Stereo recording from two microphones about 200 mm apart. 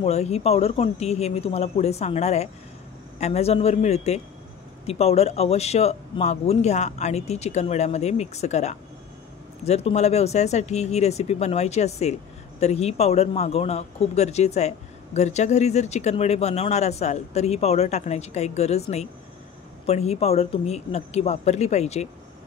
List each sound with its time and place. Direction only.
0.0 s speech: 30° left (ahead or behind)